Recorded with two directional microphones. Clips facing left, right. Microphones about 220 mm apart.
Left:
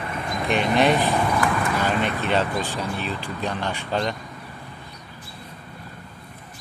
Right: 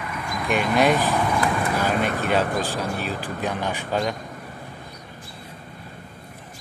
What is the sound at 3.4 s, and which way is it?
Speech, 10° right (ahead or behind).